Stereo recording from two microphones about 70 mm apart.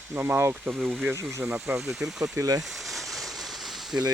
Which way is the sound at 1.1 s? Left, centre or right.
Right.